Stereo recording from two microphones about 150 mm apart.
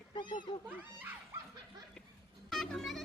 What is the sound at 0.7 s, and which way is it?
Dog, 10° right (ahead or behind).